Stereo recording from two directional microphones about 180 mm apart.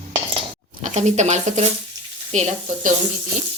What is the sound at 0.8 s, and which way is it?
Speech, 40° right (ahead or behind).